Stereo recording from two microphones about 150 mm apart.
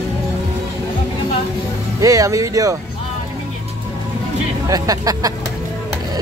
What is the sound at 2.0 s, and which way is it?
Speech, 20° right (ahead or behind).